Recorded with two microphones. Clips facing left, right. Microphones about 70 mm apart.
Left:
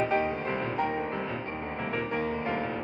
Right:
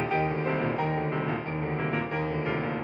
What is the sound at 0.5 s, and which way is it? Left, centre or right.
Music, right.